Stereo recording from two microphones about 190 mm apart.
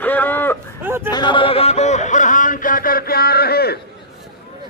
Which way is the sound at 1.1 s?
25° left (ahead or behind).